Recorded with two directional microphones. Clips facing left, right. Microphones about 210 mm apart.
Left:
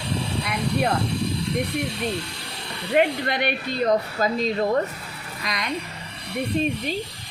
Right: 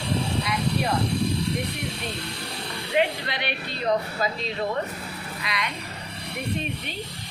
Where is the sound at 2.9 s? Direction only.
50° left (ahead or behind).